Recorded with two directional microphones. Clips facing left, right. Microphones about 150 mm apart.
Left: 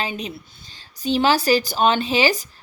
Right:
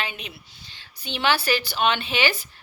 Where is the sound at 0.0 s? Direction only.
40° left (ahead or behind).